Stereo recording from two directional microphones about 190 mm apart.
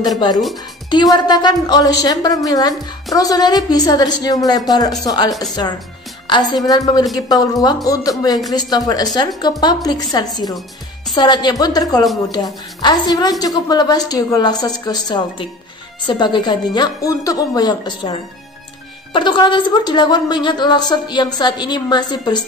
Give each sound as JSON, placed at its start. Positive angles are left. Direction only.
{"t": 1.1, "sound": "a woman's voice", "side_deg": 20}
{"t": 6.2, "sound": "a woman's voice", "side_deg": 20}
{"t": 19.1, "sound": "a woman's voice", "side_deg": 25}